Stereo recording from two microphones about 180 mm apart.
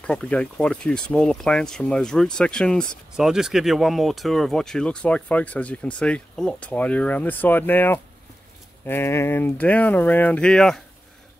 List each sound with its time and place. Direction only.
0.0 s speech: 5° left (ahead or behind)